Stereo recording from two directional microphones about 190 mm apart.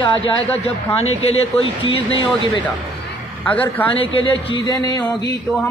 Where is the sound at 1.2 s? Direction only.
30° left (ahead or behind).